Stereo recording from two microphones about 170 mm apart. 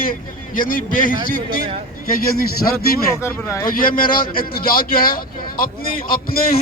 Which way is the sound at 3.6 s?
55° left (ahead or behind).